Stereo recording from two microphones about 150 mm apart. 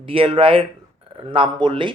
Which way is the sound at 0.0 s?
35° right (ahead or behind).